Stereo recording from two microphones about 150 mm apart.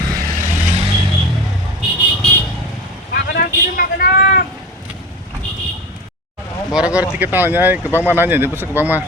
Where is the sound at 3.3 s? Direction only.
85° left.